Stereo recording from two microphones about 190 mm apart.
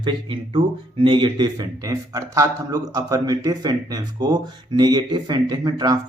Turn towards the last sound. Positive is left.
turn(degrees=-20)  # may be behind; listen again after turning